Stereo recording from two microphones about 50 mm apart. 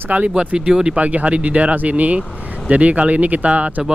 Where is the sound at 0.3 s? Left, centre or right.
Right.